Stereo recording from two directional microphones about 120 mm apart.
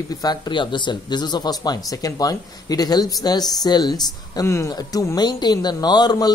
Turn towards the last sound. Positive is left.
turn(degrees=35)  # may be behind; listen again after turning